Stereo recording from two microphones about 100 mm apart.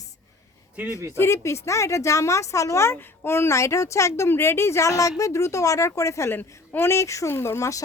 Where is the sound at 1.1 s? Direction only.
25° left (ahead or behind).